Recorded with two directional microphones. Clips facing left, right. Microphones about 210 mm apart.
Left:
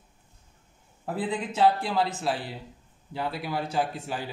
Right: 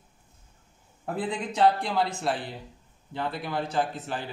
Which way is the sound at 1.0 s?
5° left (ahead or behind).